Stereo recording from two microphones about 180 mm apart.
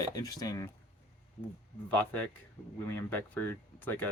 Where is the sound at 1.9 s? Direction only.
10° left (ahead or behind).